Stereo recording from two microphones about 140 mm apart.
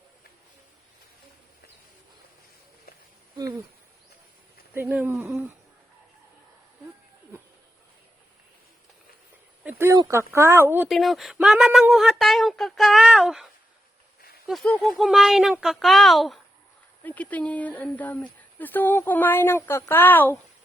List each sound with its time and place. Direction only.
3.3 s speech: 30° right (ahead or behind)
4.7 s speech: 15° right (ahead or behind)
9.6 s a sound: 15° right (ahead or behind)
10.3 s a woman's voice: 20° right (ahead or behind)
10.8 s speech: centre (ahead or behind)
17.0 s speech: 10° left (ahead or behind)